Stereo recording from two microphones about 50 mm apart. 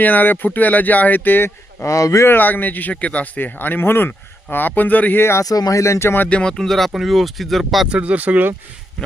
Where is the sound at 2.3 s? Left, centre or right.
Left.